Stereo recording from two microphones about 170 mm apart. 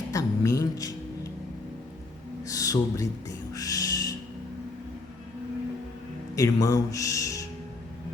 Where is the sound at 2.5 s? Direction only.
20° left (ahead or behind).